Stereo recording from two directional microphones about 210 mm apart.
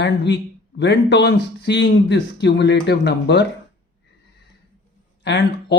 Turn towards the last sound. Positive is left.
turn(degrees=55)  # may be behind; listen again after turning